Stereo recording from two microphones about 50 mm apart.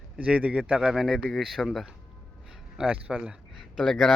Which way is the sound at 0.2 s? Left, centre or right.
Right.